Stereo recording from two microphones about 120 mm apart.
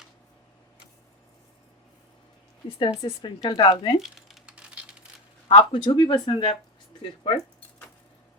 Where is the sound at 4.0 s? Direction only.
Centre (ahead or behind).